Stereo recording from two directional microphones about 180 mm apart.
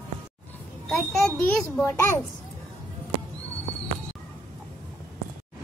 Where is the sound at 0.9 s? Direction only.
5° left (ahead or behind).